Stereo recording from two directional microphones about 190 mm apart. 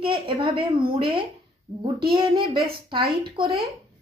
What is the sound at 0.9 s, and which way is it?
A woman's voice, 25° right (ahead or behind).